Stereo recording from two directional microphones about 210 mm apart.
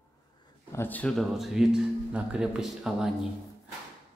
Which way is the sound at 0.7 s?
10° left (ahead or behind).